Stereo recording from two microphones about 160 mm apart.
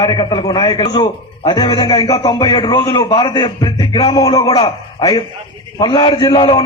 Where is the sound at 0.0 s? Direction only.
30° left (ahead or behind).